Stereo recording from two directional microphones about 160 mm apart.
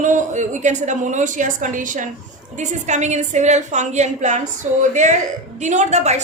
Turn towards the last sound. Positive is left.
turn(degrees=-45)  # may be behind; listen again after turning